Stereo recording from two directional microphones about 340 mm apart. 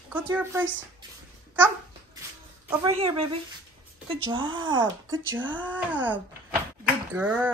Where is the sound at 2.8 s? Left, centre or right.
Centre.